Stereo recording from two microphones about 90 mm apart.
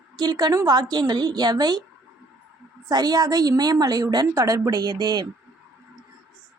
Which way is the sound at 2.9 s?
50° right (ahead or behind).